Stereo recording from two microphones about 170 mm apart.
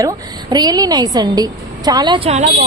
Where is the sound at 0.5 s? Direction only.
25° right (ahead or behind).